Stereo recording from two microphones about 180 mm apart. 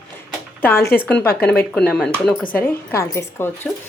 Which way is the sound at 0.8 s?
10° left (ahead or behind).